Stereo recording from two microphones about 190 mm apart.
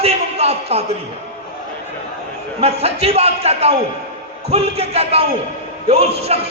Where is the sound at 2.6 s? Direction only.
35° right (ahead or behind).